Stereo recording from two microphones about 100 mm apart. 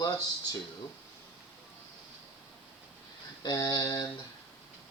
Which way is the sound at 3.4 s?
35° left (ahead or behind).